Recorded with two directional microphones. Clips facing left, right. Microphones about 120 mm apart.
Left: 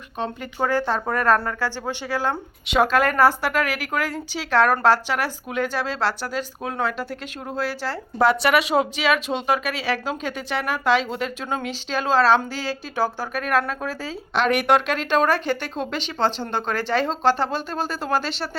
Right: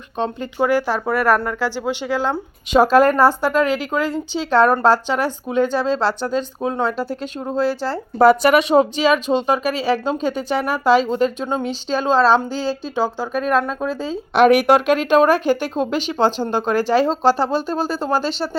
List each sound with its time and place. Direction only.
0.6 s speech: 10° right (ahead or behind)
2.7 s speech: 35° right (ahead or behind)
8.2 s speech: 45° right (ahead or behind)
11.4 s speech: 25° right (ahead or behind)
14.3 s speech: 55° right (ahead or behind); by 17.1 s 40° right (ahead or behind)
17.1 s speech: 5° right (ahead or behind)